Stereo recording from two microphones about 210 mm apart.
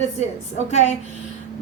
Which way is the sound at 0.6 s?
30° left (ahead or behind).